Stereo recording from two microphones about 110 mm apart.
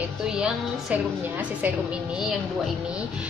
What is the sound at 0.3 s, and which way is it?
Speech, 5° right (ahead or behind).